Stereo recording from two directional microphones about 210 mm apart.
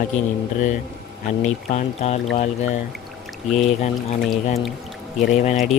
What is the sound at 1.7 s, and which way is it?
Music, 30° left (ahead or behind).